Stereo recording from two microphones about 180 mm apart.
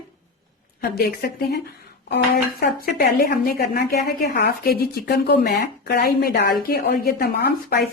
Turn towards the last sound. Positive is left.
turn(degrees=60)  # may be behind; listen again after turning